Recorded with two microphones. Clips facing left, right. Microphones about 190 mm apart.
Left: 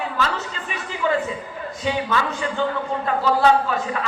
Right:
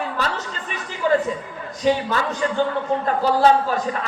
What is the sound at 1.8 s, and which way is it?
A man's voice, 40° right (ahead or behind).